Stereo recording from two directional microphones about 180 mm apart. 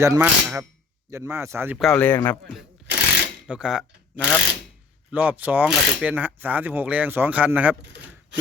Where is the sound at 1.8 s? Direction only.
5° left (ahead or behind).